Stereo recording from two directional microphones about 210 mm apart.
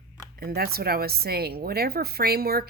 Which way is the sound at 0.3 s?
50° right (ahead or behind).